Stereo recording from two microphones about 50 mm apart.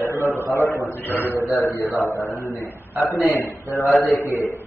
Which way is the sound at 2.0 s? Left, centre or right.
Left.